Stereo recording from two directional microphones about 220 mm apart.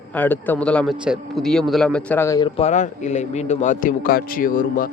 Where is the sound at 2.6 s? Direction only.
30° left (ahead or behind).